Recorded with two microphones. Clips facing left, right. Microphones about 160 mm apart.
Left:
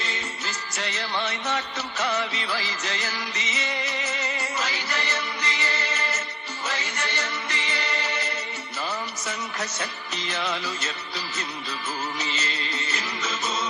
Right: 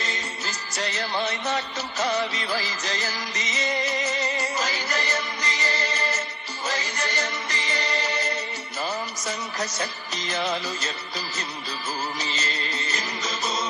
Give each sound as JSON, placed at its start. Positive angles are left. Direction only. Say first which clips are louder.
{"t": 0.0, "sound": "music", "louder": "right 1 dB", "side_deg": -40}
{"t": 9.2, "sound": "music", "louder": "right 2 dB", "side_deg": -35}
{"t": 12.2, "sound": "music", "louder": "even", "side_deg": -35}